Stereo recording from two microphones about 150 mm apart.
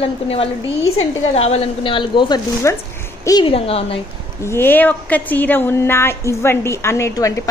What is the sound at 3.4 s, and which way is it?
Speech, 40° left (ahead or behind).